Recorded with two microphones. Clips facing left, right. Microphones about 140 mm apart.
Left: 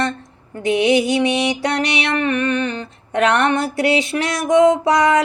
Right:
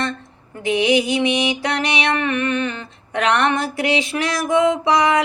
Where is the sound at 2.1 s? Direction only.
40° left (ahead or behind).